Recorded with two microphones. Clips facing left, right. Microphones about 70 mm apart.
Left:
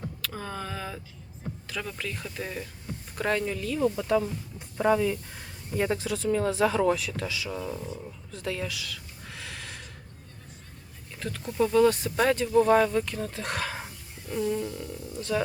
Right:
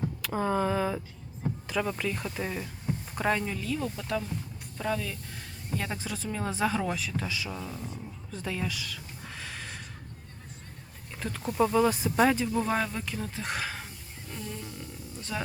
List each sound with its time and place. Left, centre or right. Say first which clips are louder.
0.2 s speech: right 10 dB; centre
1.6 s music: right 5 dB; centre
2.0 s speech: right 3 dB; centre
5.9 s speech: left 8 dB; centre
11.2 s speech: even; centre
13.7 s a sound: left 3 dB; centre
14.8 s speech: left 6 dB; centre